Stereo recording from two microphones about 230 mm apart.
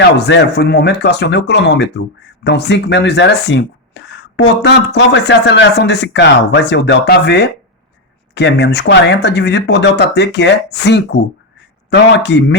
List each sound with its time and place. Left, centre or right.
0.0 s speech: left